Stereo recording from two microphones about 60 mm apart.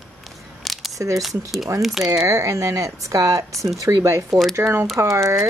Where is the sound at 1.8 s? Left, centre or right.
Centre.